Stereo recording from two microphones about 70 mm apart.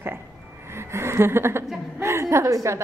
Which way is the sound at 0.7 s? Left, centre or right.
Right.